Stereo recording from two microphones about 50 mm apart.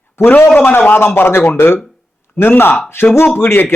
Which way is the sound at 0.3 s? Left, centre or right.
Left.